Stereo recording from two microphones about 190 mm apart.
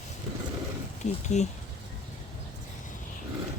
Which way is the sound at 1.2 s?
35° left (ahead or behind).